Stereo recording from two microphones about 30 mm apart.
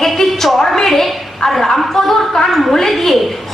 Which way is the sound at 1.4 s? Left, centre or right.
Left.